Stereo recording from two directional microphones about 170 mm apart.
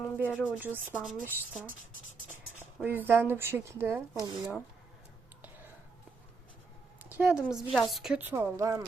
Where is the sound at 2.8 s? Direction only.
10° right (ahead or behind).